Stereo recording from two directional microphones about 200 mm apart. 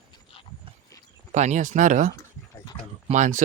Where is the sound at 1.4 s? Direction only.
35° right (ahead or behind).